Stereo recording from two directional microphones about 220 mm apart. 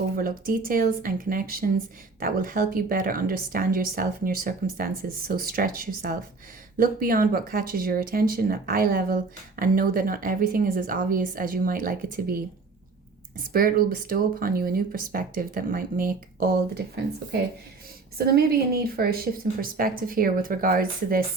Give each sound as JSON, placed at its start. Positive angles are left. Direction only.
{"t": 0.2, "sound": "speech", "side_deg": -40}
{"t": 13.4, "sound": "speech", "side_deg": -40}
{"t": 18.8, "sound": "speech", "side_deg": -45}